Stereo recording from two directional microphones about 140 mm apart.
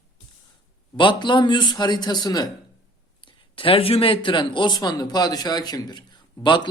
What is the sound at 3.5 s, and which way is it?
Speech, 40° left (ahead or behind).